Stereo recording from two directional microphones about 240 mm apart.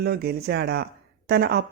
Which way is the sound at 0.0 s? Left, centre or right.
Right.